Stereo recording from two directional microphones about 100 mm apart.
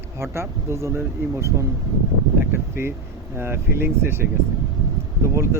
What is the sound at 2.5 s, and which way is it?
Speech, 25° right (ahead or behind).